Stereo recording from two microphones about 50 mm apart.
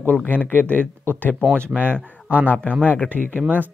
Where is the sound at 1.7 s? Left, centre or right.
Right.